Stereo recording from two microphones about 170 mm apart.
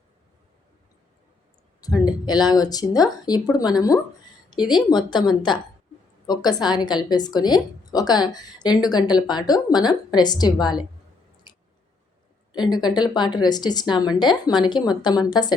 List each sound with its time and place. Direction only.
2.0 s a woman's voice: 25° left (ahead or behind)
11.5 s squish: 25° left (ahead or behind)
12.7 s a woman's voice: 25° left (ahead or behind)